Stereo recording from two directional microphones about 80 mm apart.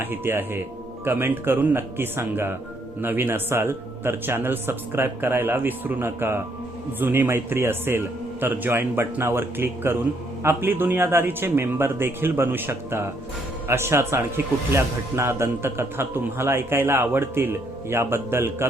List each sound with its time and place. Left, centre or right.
0.0 s a man's voice: right